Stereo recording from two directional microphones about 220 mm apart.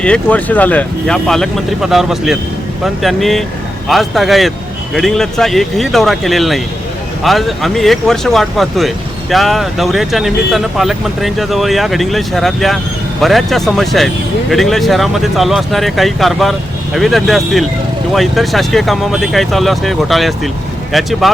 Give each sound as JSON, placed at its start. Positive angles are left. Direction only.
{"t": 0.0, "sound": "speech", "side_deg": 5}